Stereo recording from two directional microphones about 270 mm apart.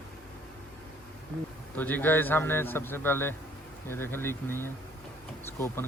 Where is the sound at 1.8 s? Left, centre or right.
Centre.